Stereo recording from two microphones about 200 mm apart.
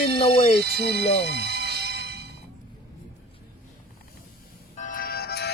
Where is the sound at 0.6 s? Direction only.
55° right (ahead or behind).